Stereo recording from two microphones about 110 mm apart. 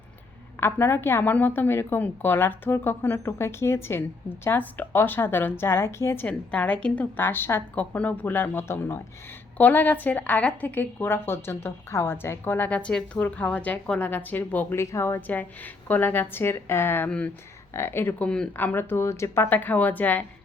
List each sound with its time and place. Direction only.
0.6 s a woman's voice: 20° left (ahead or behind)
6.2 s a woman's voice: 10° left (ahead or behind)
17.7 s a woman's voice: 20° left (ahead or behind)